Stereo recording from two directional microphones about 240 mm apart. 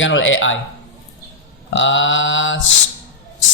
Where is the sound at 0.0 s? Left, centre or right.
Left.